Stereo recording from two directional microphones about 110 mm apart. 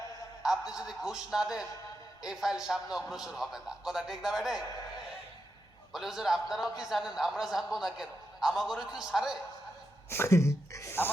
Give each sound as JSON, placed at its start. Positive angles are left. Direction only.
{"t": 0.4, "sound": "a man's voice", "side_deg": -5}
{"t": 5.9, "sound": "a man's voice", "side_deg": -5}
{"t": 10.1, "sound": "a sound", "side_deg": 25}